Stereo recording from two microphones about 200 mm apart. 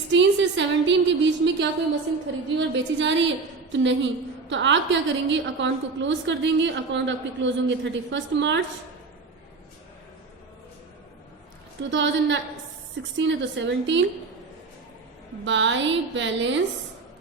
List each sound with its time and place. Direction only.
0.1 s a woman's voice: 65° right (ahead or behind)
11.8 s a woman's voice: 65° right (ahead or behind)
15.4 s a woman's voice: 65° right (ahead or behind)